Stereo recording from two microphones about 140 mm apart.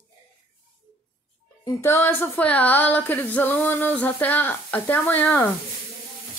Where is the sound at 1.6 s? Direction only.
20° left (ahead or behind).